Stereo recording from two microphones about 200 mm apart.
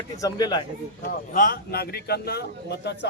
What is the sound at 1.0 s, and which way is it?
Speech, 45° left (ahead or behind).